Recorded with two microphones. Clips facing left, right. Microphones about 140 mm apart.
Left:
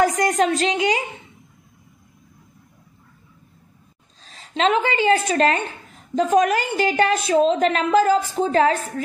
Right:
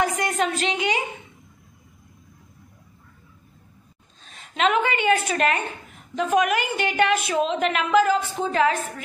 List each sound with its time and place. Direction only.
0.0 s a woman's voice: 40° left (ahead or behind)
4.3 s a woman's voice: 30° left (ahead or behind)